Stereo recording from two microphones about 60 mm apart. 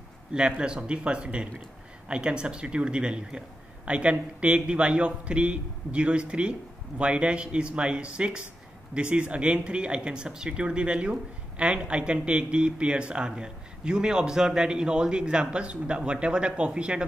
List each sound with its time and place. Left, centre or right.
0.3 s speech: centre